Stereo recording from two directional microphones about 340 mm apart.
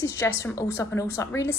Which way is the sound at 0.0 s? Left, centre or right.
Centre.